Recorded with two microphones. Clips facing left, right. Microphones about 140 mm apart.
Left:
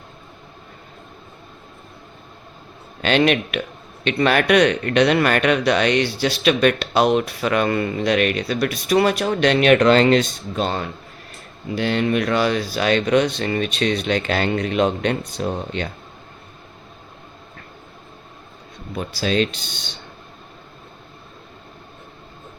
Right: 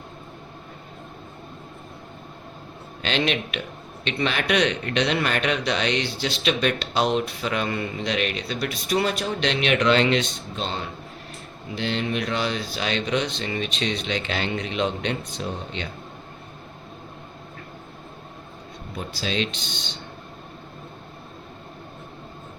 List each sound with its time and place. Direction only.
3.0 s speech: 55° left (ahead or behind)
10.5 s speech: 55° left (ahead or behind)
11.8 s speech: 60° left (ahead or behind)
19.2 s speech: 50° left (ahead or behind)